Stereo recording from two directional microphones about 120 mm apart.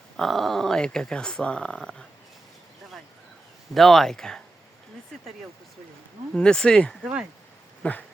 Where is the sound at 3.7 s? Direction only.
Centre (ahead or behind).